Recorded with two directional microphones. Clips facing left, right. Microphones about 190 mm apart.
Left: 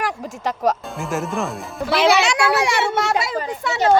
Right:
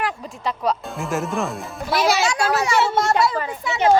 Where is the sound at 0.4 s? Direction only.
45° left (ahead or behind).